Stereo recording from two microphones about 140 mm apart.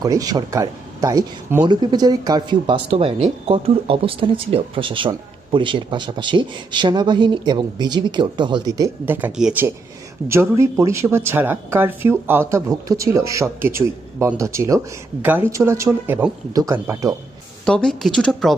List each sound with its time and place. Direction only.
0.0 s speech: 25° right (ahead or behind)
1.6 s speech: 35° right (ahead or behind)
9.0 s speech: 15° right (ahead or behind)
17.7 s speech: 5° left (ahead or behind)